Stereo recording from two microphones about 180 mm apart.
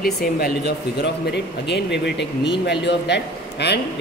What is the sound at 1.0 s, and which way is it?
Speech, 70° left (ahead or behind).